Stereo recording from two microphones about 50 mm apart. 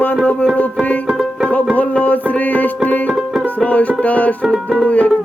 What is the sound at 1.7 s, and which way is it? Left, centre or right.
Music, left.